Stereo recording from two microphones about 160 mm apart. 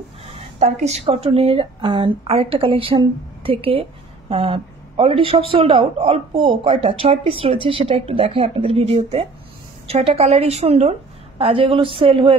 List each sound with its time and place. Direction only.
0.6 s a woman's voice: 45° right (ahead or behind)